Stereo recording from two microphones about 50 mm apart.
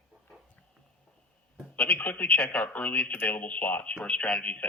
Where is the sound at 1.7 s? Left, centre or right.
Left.